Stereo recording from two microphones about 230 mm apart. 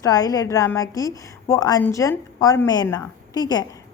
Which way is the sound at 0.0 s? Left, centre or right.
Centre.